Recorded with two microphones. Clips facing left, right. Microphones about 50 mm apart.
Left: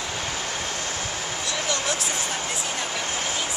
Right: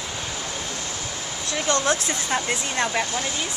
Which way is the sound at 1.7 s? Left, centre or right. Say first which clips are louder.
Right 7 dB; right.